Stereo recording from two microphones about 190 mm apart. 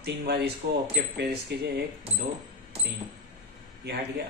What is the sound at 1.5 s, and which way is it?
Speech, 60° right (ahead or behind).